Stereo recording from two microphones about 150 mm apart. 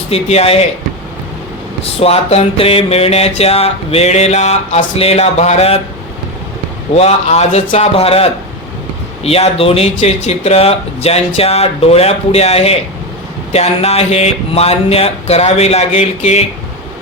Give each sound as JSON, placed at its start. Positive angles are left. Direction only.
{"t": 0.1, "sound": "mantra", "side_deg": 45}
{"t": 1.8, "sound": "mantra", "side_deg": 40}
{"t": 6.9, "sound": "mantra", "side_deg": 45}